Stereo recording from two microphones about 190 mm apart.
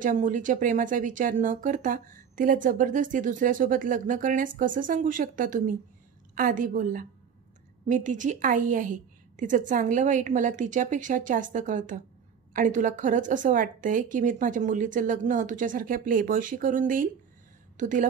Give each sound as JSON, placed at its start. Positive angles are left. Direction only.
{"t": 0.0, "sound": "a woman's voice", "side_deg": -40}